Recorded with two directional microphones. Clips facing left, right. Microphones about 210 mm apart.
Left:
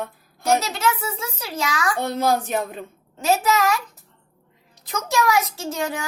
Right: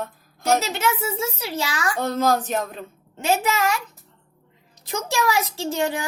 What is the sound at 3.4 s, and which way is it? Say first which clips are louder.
Speech: left 2 dB; 30° right (ahead or behind).